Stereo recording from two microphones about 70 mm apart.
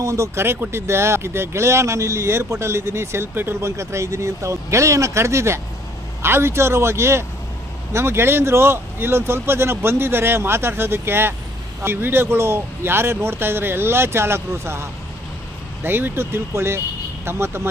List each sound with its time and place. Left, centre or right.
0.0 s speech: right